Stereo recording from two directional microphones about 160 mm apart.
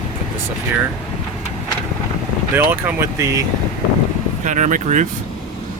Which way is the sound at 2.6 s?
15° right (ahead or behind).